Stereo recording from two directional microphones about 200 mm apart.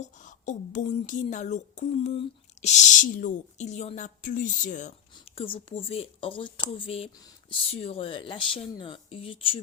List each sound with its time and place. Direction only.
0.0 s speech: 40° left (ahead or behind)